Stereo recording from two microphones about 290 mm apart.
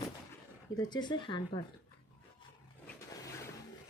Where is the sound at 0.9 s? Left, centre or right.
Centre.